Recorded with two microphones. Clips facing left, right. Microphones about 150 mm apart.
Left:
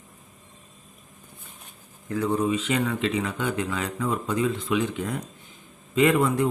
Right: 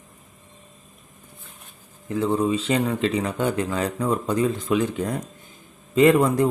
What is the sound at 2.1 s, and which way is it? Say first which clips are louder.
Speech: right 2 dB; 25° right (ahead or behind).